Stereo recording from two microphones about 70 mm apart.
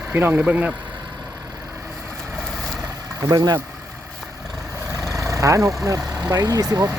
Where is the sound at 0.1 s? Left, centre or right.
Right.